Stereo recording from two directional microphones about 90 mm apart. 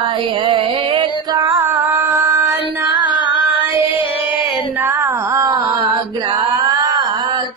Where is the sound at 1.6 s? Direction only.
25° right (ahead or behind).